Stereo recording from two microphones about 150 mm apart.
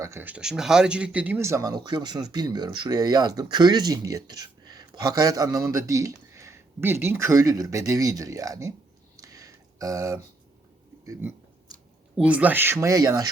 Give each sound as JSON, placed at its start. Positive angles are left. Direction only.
{"t": 0.0, "sound": "speech", "side_deg": -15}
{"t": 9.1, "sound": "a sound", "side_deg": -25}
{"t": 11.0, "sound": "speech", "side_deg": -15}